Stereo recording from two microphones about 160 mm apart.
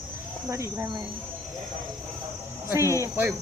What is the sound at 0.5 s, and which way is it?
Speech, 15° right (ahead or behind).